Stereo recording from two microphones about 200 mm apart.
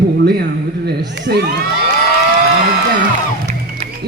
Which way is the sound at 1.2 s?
55° right (ahead or behind).